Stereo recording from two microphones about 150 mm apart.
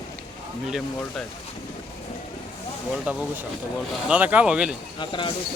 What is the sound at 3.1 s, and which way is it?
Speech, 10° right (ahead or behind).